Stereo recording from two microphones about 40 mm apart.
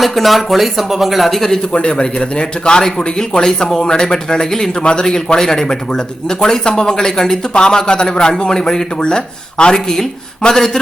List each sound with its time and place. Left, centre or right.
0.0 s speech: centre
1.7 s a man's voice: left
4.8 s a man's voice: left
5.0 s speech: centre